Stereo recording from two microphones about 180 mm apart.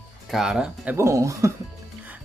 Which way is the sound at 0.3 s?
Centre (ahead or behind).